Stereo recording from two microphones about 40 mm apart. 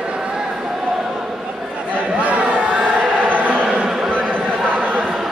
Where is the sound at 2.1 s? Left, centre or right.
Right.